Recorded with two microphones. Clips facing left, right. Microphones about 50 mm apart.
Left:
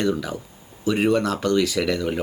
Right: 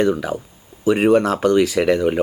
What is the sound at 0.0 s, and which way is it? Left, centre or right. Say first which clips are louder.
Speech: right 5 dB; right.